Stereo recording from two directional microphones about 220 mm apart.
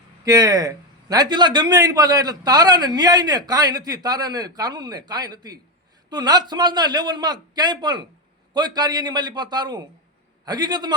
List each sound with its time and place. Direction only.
0.3 s a man's voice: 15° right (ahead or behind)